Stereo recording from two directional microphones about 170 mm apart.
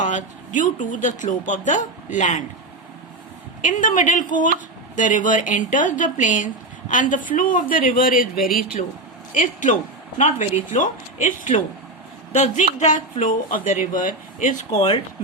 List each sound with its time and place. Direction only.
0.0 s speech: 45° left (ahead or behind)
3.6 s speech: 50° left (ahead or behind)
9.3 s speech: 50° left (ahead or behind)
14.7 s speech: 25° left (ahead or behind)